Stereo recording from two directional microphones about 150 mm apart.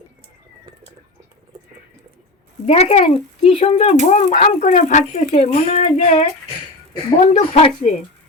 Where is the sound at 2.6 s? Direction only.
40° left (ahead or behind).